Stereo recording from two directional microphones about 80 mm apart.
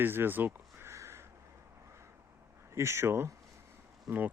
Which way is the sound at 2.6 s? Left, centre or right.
Right.